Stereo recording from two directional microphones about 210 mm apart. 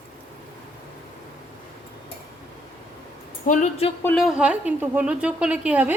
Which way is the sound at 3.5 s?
35° left (ahead or behind).